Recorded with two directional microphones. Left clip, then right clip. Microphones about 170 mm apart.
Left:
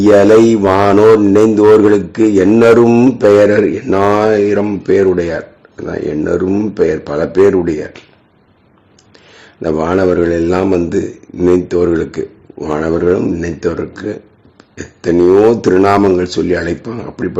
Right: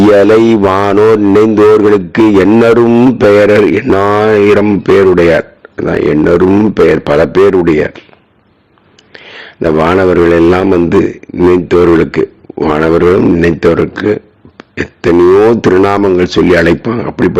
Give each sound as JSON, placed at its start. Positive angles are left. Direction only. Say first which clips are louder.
{"t": 0.1, "sound": "a man's voice", "louder": "left 2 dB", "side_deg": -40}
{"t": 2.8, "sound": "a man's voice", "louder": "right 2 dB", "side_deg": -20}
{"t": 3.2, "sound": "speech", "louder": "right 3 dB", "side_deg": -40}
{"t": 9.1, "sound": "a man's voice", "louder": "right 9 dB", "side_deg": -30}